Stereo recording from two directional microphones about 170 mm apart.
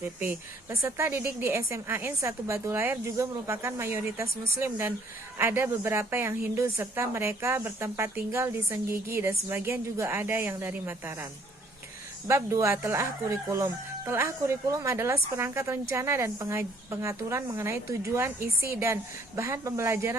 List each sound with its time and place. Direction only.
0.0 s speech: 15° right (ahead or behind)
12.3 s speech: 15° right (ahead or behind)